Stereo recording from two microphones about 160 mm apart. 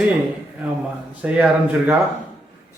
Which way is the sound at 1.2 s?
10° right (ahead or behind).